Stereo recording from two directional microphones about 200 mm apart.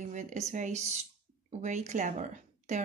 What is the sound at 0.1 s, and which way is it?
Speech, 35° right (ahead or behind).